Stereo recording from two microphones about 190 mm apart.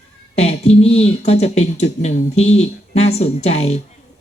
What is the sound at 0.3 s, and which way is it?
Speech, 35° left (ahead or behind).